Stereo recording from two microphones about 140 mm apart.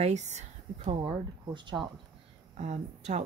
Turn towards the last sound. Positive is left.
turn(degrees=-55)  # may be behind; listen again after turning